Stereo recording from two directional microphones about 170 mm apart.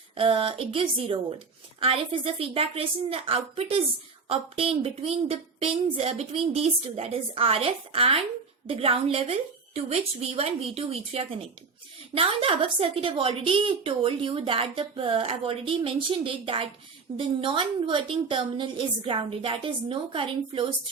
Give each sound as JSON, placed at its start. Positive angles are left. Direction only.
{"t": 0.2, "sound": "a woman's voice", "side_deg": -30}